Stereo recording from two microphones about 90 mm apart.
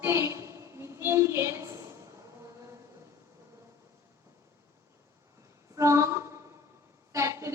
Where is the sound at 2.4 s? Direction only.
35° right (ahead or behind).